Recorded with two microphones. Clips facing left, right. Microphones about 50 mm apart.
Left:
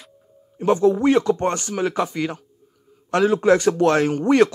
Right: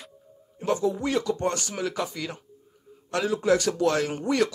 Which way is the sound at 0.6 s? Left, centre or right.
Left.